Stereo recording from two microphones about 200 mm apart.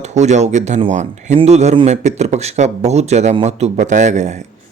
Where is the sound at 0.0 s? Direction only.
35° right (ahead or behind).